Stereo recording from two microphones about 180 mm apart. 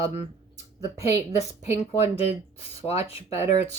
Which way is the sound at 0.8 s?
15° right (ahead or behind).